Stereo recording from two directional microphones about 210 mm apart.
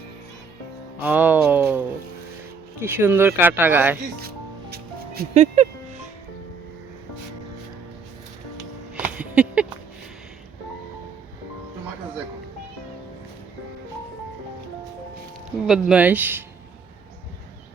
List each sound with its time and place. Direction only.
1.0 s speech: 10° right (ahead or behind)
2.8 s speech: 10° right (ahead or behind)
4.7 s music: 50° right (ahead or behind)
5.3 s speech: 35° right (ahead or behind)
9.0 s a sound: 5° right (ahead or behind)
15.6 s speech: centre (ahead or behind)